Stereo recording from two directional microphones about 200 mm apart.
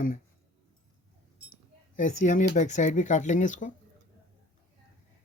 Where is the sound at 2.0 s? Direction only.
40° left (ahead or behind).